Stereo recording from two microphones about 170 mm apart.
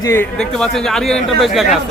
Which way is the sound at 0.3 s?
5° left (ahead or behind).